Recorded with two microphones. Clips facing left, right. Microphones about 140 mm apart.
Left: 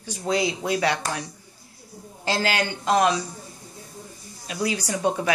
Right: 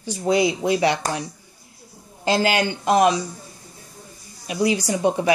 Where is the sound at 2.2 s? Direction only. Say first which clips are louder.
Right 5 dB; 20° right (ahead or behind).